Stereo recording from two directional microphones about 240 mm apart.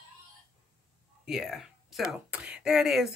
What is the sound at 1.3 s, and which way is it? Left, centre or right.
Speech, centre.